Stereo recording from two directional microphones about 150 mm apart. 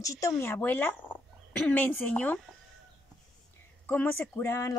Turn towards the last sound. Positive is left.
turn(degrees=15)  # may be behind; listen again after turning